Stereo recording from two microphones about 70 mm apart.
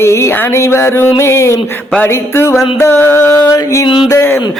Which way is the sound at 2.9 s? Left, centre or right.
Left.